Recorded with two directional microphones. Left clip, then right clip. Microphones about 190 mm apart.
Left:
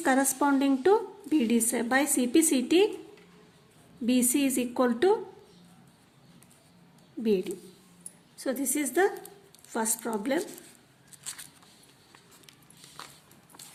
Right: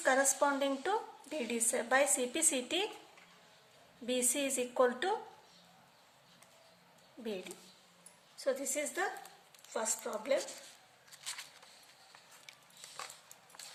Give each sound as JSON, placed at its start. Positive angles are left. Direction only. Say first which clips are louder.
{"t": 0.0, "sound": "a woman's voice", "louder": "left 4 dB", "side_deg": 40}
{"t": 4.0, "sound": "a woman's voice", "louder": "left 8 dB", "side_deg": 40}
{"t": 8.4, "sound": "a woman's voice", "louder": "left 4 dB", "side_deg": 45}